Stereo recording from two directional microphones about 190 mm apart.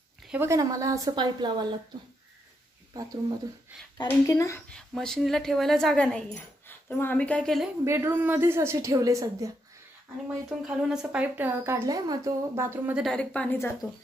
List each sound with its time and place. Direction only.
0.3 s speech: 15° right (ahead or behind)
2.9 s speech: 20° right (ahead or behind)
4.1 s speech: 15° left (ahead or behind)
4.6 s speech: 5° left (ahead or behind)
7.8 s speech: 15° right (ahead or behind)
10.6 s speech: 5° right (ahead or behind)
13.0 s speech: 5° left (ahead or behind)